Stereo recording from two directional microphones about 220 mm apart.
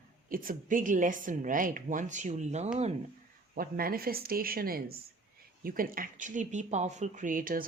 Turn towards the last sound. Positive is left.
turn(degrees=-40)  # may be behind; listen again after turning